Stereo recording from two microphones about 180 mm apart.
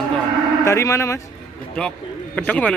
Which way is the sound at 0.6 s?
15° left (ahead or behind).